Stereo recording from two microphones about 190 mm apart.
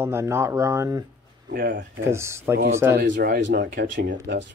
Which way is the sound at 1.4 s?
55° right (ahead or behind).